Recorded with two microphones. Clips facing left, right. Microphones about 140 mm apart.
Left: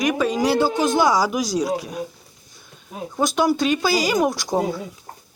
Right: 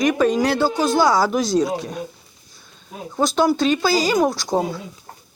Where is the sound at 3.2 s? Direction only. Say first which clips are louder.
Right 2 dB; 15° left (ahead or behind).